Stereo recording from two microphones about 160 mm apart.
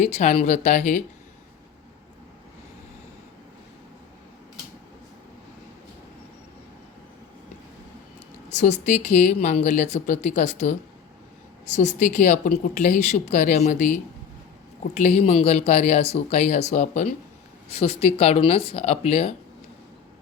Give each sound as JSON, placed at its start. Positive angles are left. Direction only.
{"t": 0.0, "sound": "speech", "side_deg": 45}
{"t": 8.5, "sound": "speech", "side_deg": 50}
{"t": 17.7, "sound": "speech", "side_deg": 40}